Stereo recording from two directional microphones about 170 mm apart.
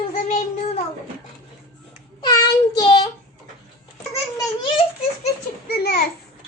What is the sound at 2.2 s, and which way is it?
Child singing, 20° left (ahead or behind).